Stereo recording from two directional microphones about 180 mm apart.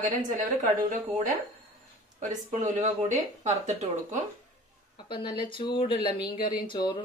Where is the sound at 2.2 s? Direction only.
40° right (ahead or behind).